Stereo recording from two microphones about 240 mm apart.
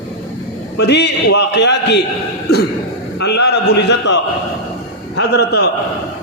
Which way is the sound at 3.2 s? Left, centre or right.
Left.